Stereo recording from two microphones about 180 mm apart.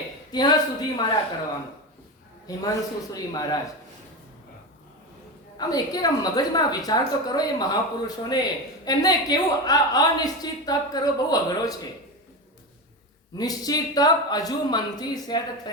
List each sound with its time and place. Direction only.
0.3 s a woman's voice: 25° left (ahead or behind)
2.6 s a woman's voice: 20° left (ahead or behind)
5.5 s a woman's voice: 20° left (ahead or behind)
13.3 s a woman's voice: 20° left (ahead or behind)